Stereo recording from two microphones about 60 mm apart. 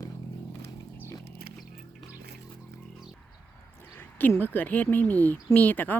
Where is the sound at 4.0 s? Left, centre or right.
Left.